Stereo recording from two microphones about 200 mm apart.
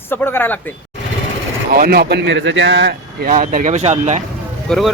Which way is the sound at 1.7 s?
50° right (ahead or behind).